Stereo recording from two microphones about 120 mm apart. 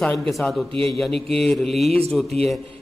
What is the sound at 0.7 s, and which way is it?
Speech, 50° right (ahead or behind).